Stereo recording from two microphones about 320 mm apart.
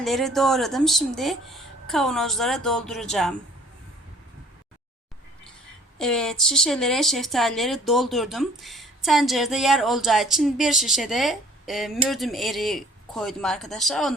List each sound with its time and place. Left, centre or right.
0.0 s speech: centre
6.0 s speech: centre